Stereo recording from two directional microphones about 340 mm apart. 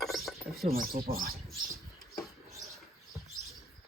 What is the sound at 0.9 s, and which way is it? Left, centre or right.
Speech, right.